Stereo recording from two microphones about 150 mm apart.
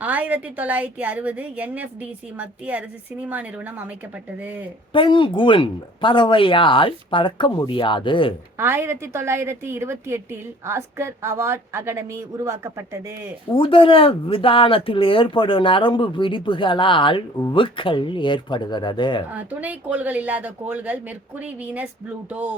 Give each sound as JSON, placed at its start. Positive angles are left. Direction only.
{"t": 0.0, "sound": "a woman's voice", "side_deg": -10}
{"t": 4.9, "sound": "speech", "side_deg": 35}
{"t": 8.5, "sound": "a woman's voice", "side_deg": -15}
{"t": 13.5, "sound": "speech", "side_deg": 35}
{"t": 19.3, "sound": "a woman's voice", "side_deg": -10}